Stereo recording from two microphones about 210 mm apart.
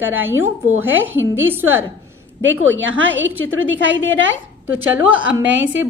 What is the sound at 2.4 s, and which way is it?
A woman's voice, 65° right (ahead or behind).